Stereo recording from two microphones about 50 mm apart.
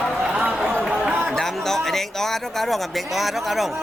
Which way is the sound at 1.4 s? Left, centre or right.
Centre.